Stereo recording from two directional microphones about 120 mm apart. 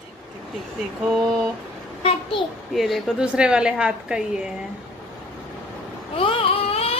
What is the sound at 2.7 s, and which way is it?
A woman's voice, centre (ahead or behind).